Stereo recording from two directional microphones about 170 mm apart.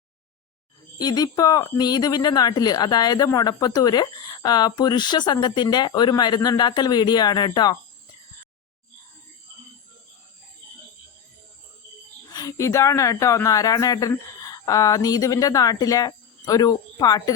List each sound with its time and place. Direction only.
0.9 s speech: 25° left (ahead or behind)
12.3 s speech: 20° left (ahead or behind)